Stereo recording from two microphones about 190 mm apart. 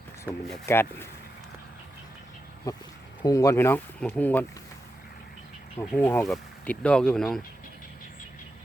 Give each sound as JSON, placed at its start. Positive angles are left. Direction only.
{"t": 0.3, "sound": "speech", "side_deg": 10}
{"t": 2.7, "sound": "speech", "side_deg": 20}
{"t": 6.0, "sound": "speech", "side_deg": 10}